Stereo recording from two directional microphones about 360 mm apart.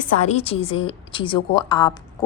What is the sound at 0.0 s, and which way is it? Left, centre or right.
A woman's voice, centre.